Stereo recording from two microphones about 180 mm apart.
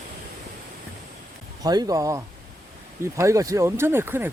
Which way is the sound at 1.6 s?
20° right (ahead or behind).